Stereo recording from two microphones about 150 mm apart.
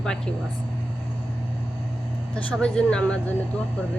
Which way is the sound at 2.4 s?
5° left (ahead or behind).